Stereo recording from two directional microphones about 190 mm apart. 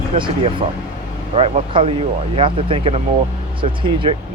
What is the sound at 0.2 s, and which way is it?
Speech, 30° right (ahead or behind).